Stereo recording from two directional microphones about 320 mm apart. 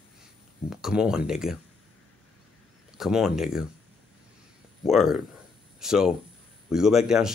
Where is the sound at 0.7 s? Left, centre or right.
Centre.